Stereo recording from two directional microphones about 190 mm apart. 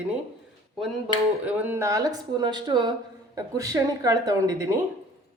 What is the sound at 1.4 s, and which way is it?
Speech, 10° right (ahead or behind).